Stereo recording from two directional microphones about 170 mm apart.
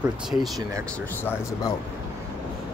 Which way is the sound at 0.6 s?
20° right (ahead or behind).